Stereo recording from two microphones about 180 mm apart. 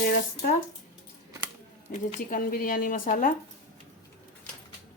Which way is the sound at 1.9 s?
50° left (ahead or behind).